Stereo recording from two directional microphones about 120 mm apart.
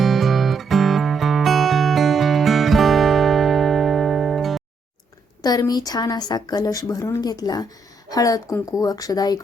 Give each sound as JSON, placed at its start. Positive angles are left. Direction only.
{"t": 0.0, "sound": "music", "side_deg": 0}
{"t": 5.4, "sound": "a woman's voice", "side_deg": 30}